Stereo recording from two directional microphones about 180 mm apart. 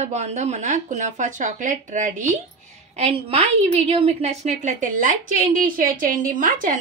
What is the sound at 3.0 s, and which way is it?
A woman's voice, 35° right (ahead or behind).